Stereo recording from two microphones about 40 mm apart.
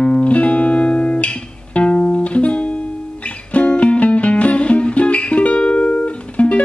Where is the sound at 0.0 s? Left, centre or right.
Left.